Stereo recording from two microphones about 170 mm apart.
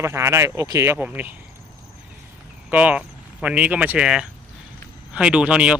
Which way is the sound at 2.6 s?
10° right (ahead or behind).